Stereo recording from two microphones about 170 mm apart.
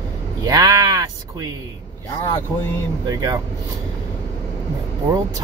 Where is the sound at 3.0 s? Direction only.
25° right (ahead or behind).